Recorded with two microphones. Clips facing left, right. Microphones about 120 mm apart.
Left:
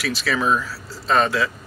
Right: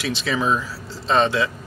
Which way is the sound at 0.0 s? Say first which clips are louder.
Even; 25° right (ahead or behind).